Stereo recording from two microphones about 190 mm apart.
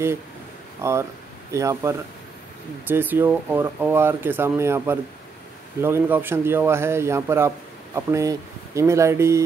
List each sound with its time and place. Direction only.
0.8 s a man's voice: 15° right (ahead or behind)